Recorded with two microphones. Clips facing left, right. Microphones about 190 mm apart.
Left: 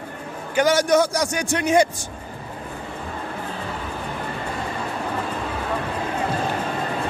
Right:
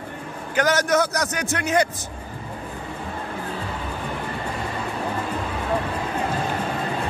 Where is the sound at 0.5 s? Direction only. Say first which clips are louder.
Left 3 dB; 10° left (ahead or behind).